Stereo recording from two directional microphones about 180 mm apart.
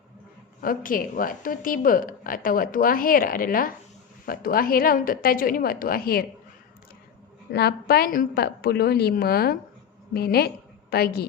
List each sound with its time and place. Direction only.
0.6 s a woman's voice: 50° left (ahead or behind)
7.5 s a woman's voice: 65° left (ahead or behind)